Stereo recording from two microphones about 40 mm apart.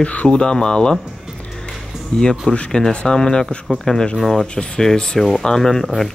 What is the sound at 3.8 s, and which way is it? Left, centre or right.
Speech, centre.